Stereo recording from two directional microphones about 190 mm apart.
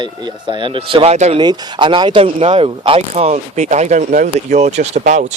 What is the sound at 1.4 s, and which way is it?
Speech, 20° right (ahead or behind).